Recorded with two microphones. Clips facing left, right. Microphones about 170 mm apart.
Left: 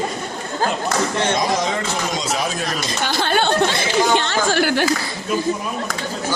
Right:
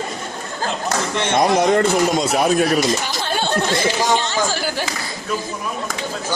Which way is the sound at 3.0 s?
65° left (ahead or behind).